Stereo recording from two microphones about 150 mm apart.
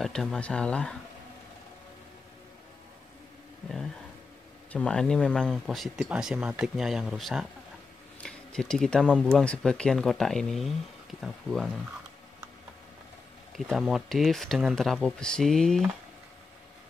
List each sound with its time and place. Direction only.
0.0 s speech: centre (ahead or behind)
3.6 s a sound: centre (ahead or behind)
4.7 s speech: 5° left (ahead or behind)
13.7 s speech: centre (ahead or behind)